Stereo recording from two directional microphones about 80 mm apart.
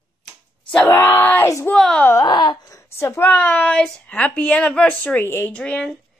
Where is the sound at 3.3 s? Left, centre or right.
Centre.